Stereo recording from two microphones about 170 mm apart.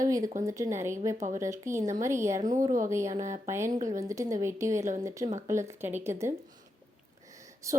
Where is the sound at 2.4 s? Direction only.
50° right (ahead or behind).